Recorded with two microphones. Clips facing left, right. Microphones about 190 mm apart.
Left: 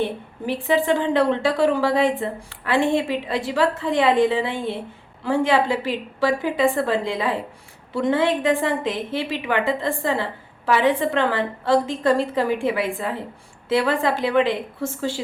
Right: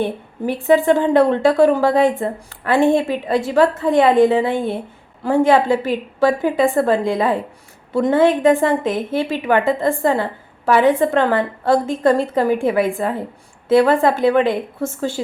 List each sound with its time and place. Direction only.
0.0 s a woman's voice: 45° right (ahead or behind)